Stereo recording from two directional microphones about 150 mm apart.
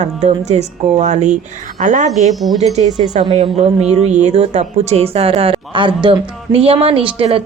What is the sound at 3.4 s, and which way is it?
A woman's voice, 45° right (ahead or behind).